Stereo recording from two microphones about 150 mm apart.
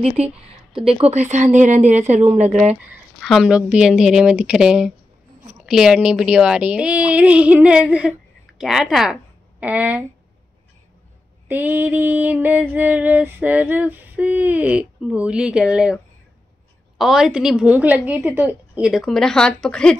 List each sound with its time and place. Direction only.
0.2 s speech: 45° right (ahead or behind)
2.7 s a woman's voice: 5° right (ahead or behind)
5.7 s female singing: 5° right (ahead or behind)
8.5 s speech: centre (ahead or behind)
11.4 s female singing: 10° right (ahead or behind)
17.0 s a woman's voice: centre (ahead or behind)